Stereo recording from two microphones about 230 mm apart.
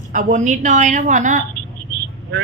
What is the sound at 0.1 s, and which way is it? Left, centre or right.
A woman's voice, right.